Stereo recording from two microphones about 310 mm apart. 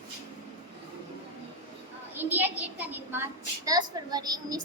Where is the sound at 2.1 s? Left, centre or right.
Centre.